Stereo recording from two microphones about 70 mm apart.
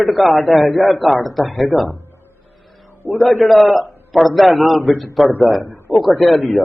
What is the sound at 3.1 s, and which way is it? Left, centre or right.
A man's voice, centre.